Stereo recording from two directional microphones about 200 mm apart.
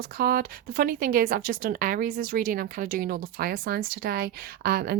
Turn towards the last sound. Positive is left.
turn(degrees=-50)  # may be behind; listen again after turning